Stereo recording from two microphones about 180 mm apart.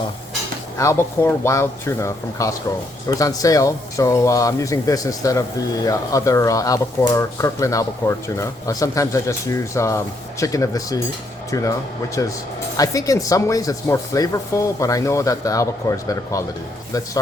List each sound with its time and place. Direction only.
0.8 s speech: 15° left (ahead or behind)
12.7 s speech: 20° left (ahead or behind)